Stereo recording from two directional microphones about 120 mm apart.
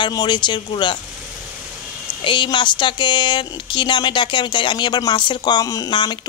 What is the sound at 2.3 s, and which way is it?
Speech, 40° left (ahead or behind).